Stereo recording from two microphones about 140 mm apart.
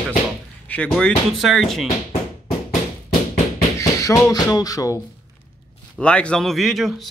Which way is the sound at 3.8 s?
25° left (ahead or behind).